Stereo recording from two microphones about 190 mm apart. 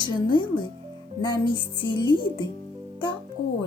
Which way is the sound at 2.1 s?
25° right (ahead or behind).